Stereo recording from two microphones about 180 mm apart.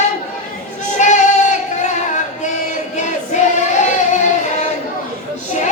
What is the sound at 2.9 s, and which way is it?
Music, 40° left (ahead or behind).